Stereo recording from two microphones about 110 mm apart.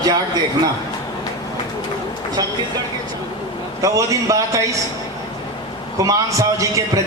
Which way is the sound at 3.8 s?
30° right (ahead or behind).